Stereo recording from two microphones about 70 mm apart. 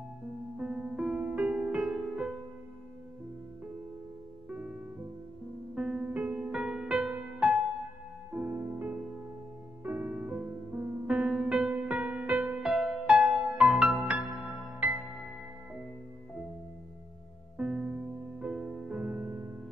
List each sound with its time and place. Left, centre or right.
0.6 s music: centre
4.5 s music: right
5.8 s music: centre
8.5 s music: right
12.4 s music: centre
17.6 s music: centre